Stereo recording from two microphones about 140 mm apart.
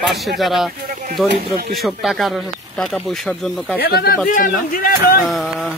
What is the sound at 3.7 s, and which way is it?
A man's voice, 90° left.